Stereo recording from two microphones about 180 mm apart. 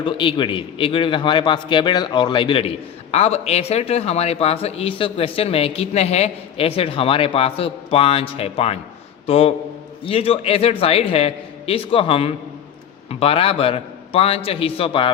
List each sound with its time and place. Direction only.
0.0 s a man's voice: 25° left (ahead or behind)